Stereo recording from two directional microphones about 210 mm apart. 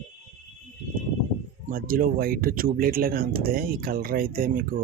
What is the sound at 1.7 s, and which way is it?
Speech, 40° right (ahead or behind).